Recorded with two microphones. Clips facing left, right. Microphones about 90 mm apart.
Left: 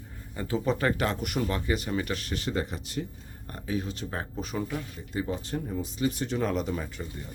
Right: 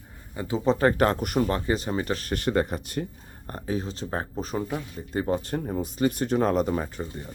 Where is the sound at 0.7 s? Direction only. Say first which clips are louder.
Right 7 dB; 35° right (ahead or behind).